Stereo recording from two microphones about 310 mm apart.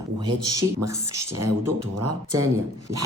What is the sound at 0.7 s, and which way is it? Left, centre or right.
Speech, right.